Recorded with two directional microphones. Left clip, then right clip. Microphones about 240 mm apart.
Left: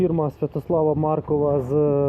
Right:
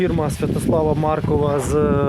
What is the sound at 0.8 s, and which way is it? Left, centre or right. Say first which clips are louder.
Speech: even; right.